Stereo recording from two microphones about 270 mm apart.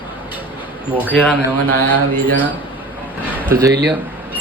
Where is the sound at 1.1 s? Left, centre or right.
Centre.